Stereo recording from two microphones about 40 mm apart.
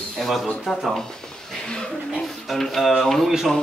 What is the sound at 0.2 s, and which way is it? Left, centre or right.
Speech, centre.